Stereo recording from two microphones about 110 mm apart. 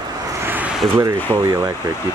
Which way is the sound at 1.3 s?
25° right (ahead or behind).